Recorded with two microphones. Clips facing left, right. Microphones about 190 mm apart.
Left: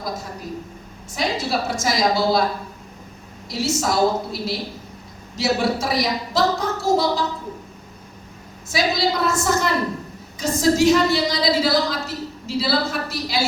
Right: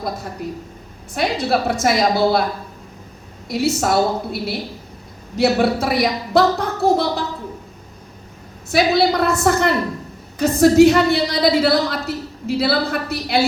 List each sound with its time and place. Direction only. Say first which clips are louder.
1.1 s a woman's voice: right 4 dB; 60° right (ahead or behind)
3.5 s a woman's voice: right 4 dB; 60° right (ahead or behind)
8.7 s a woman's voice: right 5 dB; 60° right (ahead or behind)